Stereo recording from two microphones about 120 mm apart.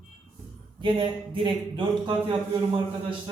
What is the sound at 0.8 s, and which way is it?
Speech, 45° right (ahead or behind).